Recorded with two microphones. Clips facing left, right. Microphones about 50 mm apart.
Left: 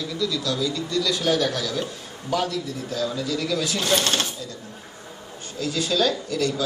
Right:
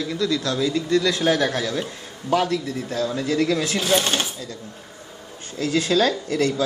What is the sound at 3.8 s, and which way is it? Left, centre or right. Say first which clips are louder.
Speech: even; centre.